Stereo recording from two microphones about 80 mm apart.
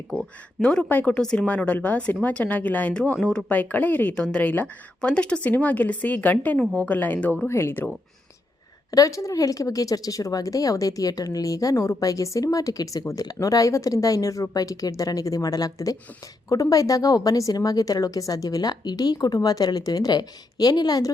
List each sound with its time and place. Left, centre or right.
0.6 s speech: centre
1.2 s a woman's voice: centre
4.1 s a woman's voice: centre
7.4 s speech: left
8.9 s speech: left